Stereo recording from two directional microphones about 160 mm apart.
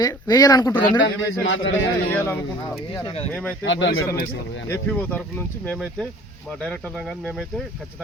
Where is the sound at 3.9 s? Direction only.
60° left (ahead or behind).